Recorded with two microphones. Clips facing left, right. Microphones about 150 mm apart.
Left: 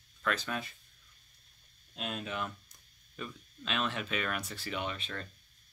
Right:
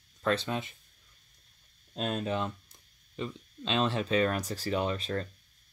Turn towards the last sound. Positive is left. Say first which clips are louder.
# right 7 dB
turn(degrees=-35)  # may be behind; listen again after turning